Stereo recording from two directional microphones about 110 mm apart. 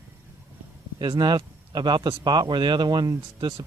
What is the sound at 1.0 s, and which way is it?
Speech, 45° right (ahead or behind).